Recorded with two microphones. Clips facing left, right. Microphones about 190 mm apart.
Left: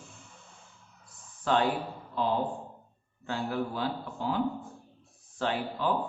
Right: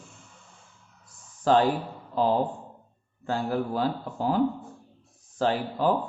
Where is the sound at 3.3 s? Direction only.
40° right (ahead or behind).